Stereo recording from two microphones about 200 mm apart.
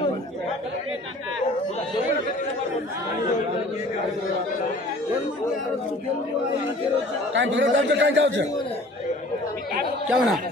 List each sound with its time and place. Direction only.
7.3 s a man's voice: 70° right (ahead or behind)
10.0 s speech: centre (ahead or behind)